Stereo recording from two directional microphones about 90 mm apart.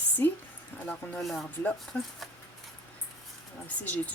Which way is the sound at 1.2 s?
Centre (ahead or behind).